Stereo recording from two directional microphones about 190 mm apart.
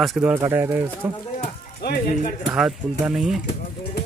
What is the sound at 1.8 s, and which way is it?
Speech, 55° left (ahead or behind).